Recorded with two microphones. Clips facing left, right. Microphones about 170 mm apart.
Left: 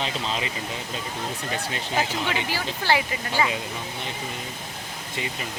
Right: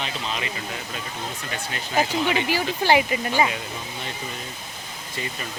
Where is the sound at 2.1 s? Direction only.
15° right (ahead or behind).